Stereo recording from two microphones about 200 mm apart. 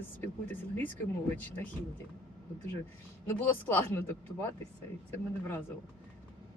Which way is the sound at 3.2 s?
10° left (ahead or behind).